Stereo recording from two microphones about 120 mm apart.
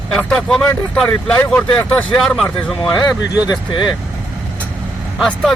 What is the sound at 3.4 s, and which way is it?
Speech, 35° left (ahead or behind).